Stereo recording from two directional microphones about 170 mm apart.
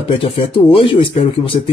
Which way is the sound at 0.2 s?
30° left (ahead or behind).